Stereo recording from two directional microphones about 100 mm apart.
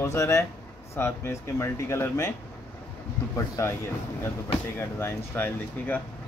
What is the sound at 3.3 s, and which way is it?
Speech, 30° left (ahead or behind).